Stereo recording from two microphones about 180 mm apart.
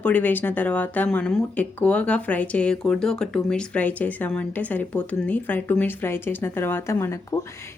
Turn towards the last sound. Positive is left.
turn(degrees=15)  # may be behind; listen again after turning